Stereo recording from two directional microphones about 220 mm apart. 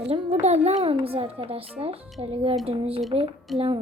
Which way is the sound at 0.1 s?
30° right (ahead or behind).